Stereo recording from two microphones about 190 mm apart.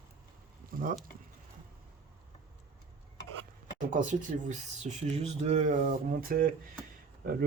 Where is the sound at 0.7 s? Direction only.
50° right (ahead or behind).